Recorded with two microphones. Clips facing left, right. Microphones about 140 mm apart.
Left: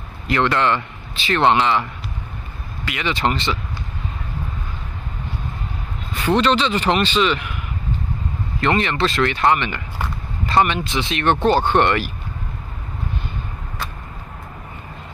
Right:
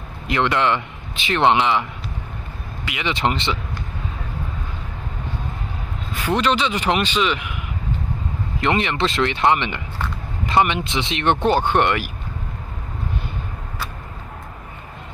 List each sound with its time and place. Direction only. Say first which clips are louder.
0.3 s speech: left 1 dB; 15° right (ahead or behind)
6.1 s speech: left 3 dB; 10° right (ahead or behind)
8.5 s speech: left 1 dB; 20° right (ahead or behind)